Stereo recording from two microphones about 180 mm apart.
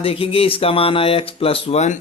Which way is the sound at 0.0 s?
30° left (ahead or behind).